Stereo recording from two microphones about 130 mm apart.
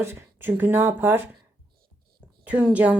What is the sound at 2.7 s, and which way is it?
Speech, 10° right (ahead or behind).